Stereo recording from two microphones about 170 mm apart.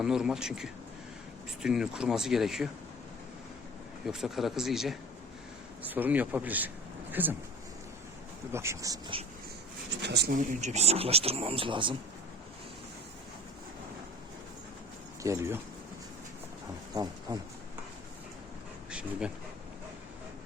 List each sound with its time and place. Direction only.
0.0 s speech: 5° right (ahead or behind)
4.0 s speech: centre (ahead or behind)
8.5 s speech: 15° right (ahead or behind)
10.0 s speech: 80° right
10.3 s speech: 45° right (ahead or behind); by 11.9 s 30° right (ahead or behind)
15.2 s speech: 15° right (ahead or behind)
16.9 s speech: 25° right (ahead or behind)
18.9 s dog: 5° right (ahead or behind)